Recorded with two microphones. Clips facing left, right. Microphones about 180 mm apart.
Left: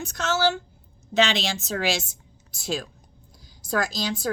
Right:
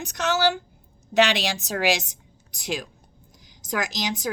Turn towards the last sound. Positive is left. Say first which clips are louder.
# left 1 dB
turn(degrees=-15)  # may be behind; listen again after turning